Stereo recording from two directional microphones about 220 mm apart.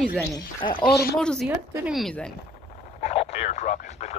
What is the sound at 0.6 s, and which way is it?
Speech, 20° left (ahead or behind).